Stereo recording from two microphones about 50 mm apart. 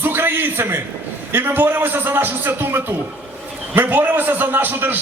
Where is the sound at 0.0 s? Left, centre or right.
Right.